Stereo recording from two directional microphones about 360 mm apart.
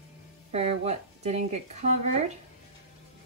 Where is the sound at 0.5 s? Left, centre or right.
Centre.